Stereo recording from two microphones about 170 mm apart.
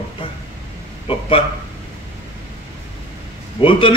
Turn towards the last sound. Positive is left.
turn(degrees=30)  # may be behind; listen again after turning